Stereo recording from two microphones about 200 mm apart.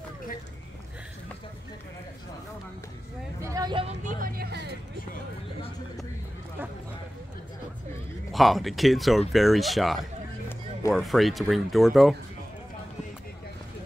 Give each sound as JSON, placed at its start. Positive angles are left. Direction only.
{"t": 3.4, "sound": "a sound", "side_deg": -20}
{"t": 3.8, "sound": "music", "side_deg": -40}
{"t": 8.3, "sound": "speech", "side_deg": 0}